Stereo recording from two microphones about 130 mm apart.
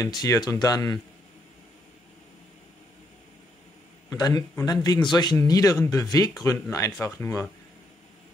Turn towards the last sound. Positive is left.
turn(degrees=20)  # may be behind; listen again after turning